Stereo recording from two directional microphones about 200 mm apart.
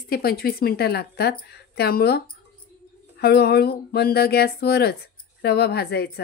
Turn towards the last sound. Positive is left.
turn(degrees=50)  # may be behind; listen again after turning